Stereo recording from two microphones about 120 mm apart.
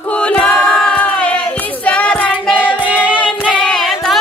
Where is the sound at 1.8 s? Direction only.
10° left (ahead or behind).